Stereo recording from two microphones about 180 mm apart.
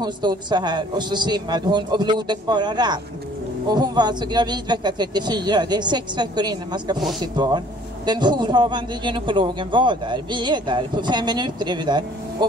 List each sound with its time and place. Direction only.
0.0 s a man's voice: 25° right (ahead or behind)